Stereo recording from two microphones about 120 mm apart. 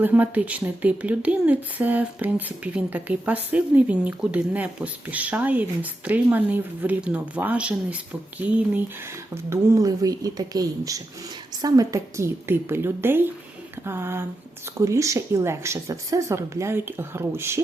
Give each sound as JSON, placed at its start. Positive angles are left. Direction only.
{"t": 0.0, "sound": "a woman's voice", "side_deg": -15}
{"t": 9.3, "sound": "speech", "side_deg": -25}